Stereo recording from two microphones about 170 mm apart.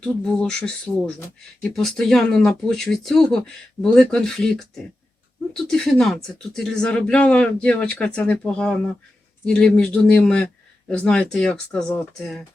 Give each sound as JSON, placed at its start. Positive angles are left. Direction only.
{"t": 0.0, "sound": "speech", "side_deg": 5}